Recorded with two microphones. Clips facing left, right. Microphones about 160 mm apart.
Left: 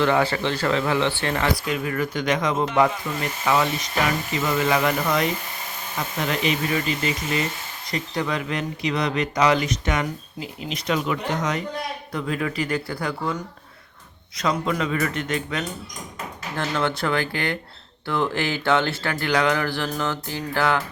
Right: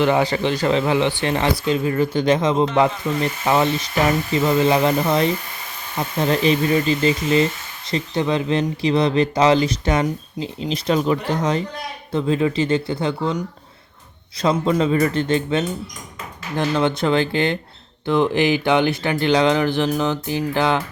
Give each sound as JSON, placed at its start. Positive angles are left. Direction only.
{"t": 0.0, "sound": "speech", "side_deg": -15}
{"t": 14.4, "sound": "speech", "side_deg": -30}